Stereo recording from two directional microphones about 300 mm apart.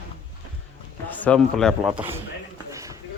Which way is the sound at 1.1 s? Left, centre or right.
Centre.